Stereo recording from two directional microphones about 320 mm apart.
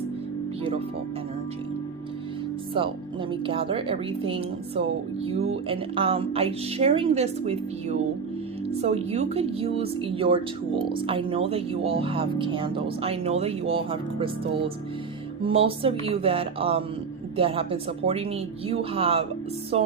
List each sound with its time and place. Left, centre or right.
2.8 s speech: centre
19.7 s music: centre